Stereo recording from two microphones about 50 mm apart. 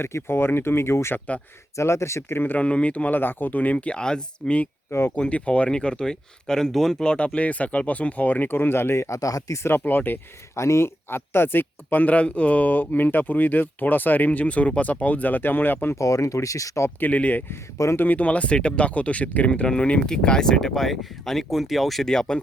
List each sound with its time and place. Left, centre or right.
0.0 s speech: left
1.7 s speech: left
2.3 s speech: left
2.6 s speech: left
3.2 s speech: left; by 4.5 s centre
4.9 s speech: left
5.1 s speech: left; by 6.9 s centre
7.0 s speech: centre; by 9.6 s left
9.8 s speech: left
10.5 s speech: left
16.0 s speech: left
17.0 s speech: left
19.5 s speech: centre
22.0 s speech: centre